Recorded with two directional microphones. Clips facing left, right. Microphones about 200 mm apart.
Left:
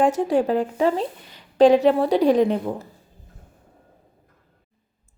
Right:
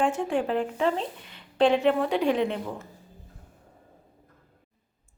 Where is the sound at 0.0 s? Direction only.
40° left (ahead or behind).